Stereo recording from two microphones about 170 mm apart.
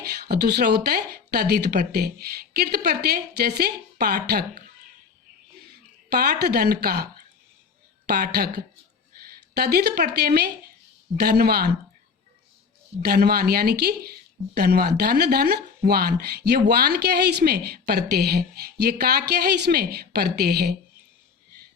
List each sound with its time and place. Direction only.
0.3 s speech: 70° right (ahead or behind)
6.1 s a woman's voice: 70° right (ahead or behind)
13.1 s a woman's voice: 65° right (ahead or behind)